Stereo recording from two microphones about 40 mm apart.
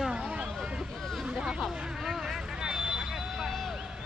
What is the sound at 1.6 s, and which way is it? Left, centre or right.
Vehicle, centre.